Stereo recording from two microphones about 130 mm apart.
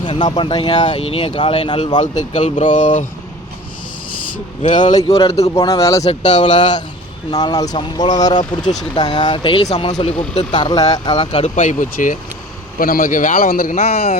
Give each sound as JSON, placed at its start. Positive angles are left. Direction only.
{"t": 0.0, "sound": "speech", "side_deg": 35}
{"t": 2.0, "sound": "speech", "side_deg": 70}
{"t": 4.7, "sound": "speech", "side_deg": 75}
{"t": 4.9, "sound": "speech", "side_deg": 30}
{"t": 6.1, "sound": "speech", "side_deg": 65}
{"t": 7.3, "sound": "speech", "side_deg": 30}
{"t": 10.6, "sound": "speech", "side_deg": 30}
{"t": 11.4, "sound": "speech", "side_deg": 70}
{"t": 13.7, "sound": "speech", "side_deg": 55}